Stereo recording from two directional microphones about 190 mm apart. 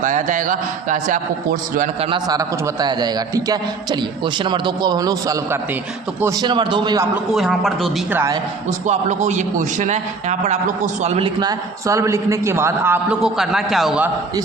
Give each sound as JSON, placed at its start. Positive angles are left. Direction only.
{"t": 0.0, "sound": "a man's voice", "side_deg": -45}
{"t": 2.0, "sound": "a man's voice", "side_deg": -25}
{"t": 7.3, "sound": "a man's voice", "side_deg": 0}
{"t": 8.1, "sound": "a man's voice", "side_deg": -15}
{"t": 8.9, "sound": "a man's voice", "side_deg": -40}
{"t": 11.3, "sound": "a man's voice", "side_deg": -20}